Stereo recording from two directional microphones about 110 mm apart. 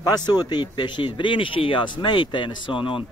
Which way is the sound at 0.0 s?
40° left (ahead or behind).